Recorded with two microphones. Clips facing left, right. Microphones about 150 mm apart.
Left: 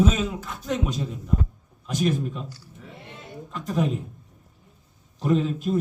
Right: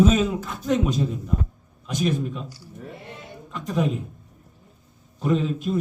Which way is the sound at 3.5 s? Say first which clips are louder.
Right 1 dB; centre (ahead or behind).